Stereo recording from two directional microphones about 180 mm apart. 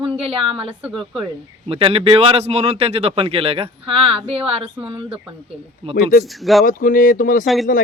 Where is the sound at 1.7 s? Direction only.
30° right (ahead or behind).